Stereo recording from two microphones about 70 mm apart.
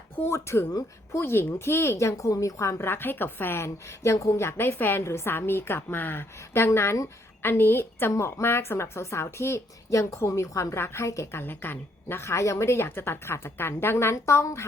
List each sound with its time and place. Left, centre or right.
0.3 s speech: left